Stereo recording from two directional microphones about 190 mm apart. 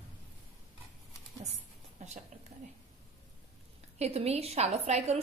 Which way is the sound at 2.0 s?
35° right (ahead or behind).